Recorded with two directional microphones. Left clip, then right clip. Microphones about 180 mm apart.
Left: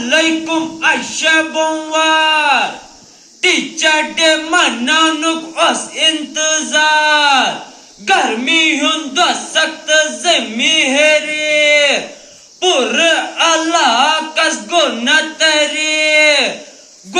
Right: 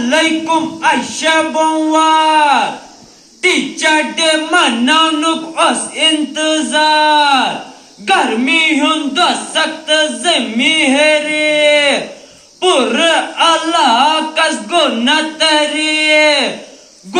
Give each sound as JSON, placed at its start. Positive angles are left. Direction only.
{"t": 0.0, "sound": "speech", "side_deg": 30}